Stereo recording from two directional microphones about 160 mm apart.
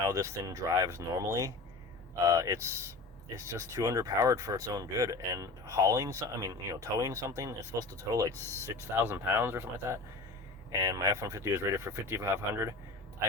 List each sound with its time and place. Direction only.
0.1 s speech: 20° right (ahead or behind)
8.3 s speech: 15° left (ahead or behind)
8.6 s speech: 15° right (ahead or behind)